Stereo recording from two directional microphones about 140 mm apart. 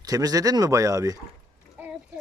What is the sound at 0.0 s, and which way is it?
Speech, 25° right (ahead or behind).